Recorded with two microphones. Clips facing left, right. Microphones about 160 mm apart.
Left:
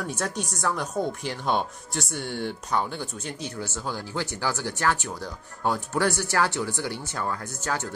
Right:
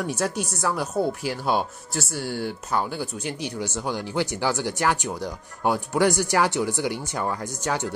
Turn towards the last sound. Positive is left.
turn(degrees=-15)  # may be behind; listen again after turning